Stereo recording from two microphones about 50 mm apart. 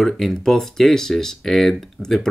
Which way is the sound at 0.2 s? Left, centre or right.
Centre.